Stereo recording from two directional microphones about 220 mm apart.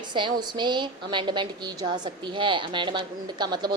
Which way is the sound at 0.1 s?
20° right (ahead or behind).